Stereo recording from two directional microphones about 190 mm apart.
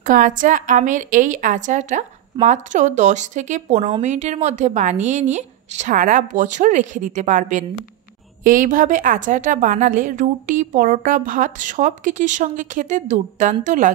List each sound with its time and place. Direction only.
0.0 s a woman's voice: 45° right (ahead or behind)